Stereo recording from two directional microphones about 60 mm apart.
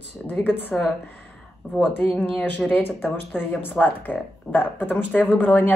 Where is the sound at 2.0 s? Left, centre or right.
Centre.